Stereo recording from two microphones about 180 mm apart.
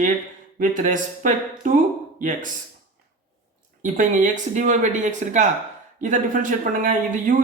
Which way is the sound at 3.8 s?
45° right (ahead or behind).